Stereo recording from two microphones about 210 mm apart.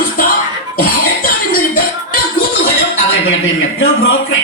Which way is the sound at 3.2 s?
65° left (ahead or behind).